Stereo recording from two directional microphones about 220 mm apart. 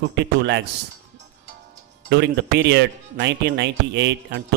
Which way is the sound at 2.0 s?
50° right (ahead or behind).